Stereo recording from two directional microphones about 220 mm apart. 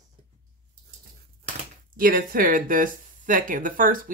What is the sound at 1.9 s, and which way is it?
Speech, 40° right (ahead or behind).